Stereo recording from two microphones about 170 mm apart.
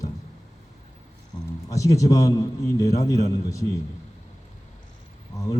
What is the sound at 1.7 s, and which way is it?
A man's voice, 20° left (ahead or behind).